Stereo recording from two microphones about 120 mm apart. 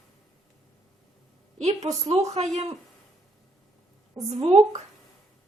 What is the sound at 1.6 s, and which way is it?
Speech, 65° right (ahead or behind).